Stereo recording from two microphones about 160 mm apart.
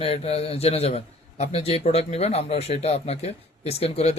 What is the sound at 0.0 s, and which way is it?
A man's voice, 40° left (ahead or behind).